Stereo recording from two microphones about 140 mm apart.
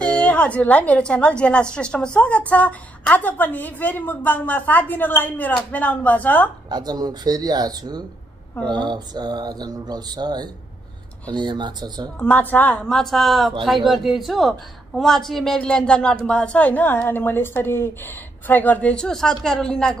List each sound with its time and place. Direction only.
0.2 s a woman's voice: 10° left (ahead or behind)
6.7 s speech: 30° right (ahead or behind)
12.2 s a woman's voice: 10° left (ahead or behind)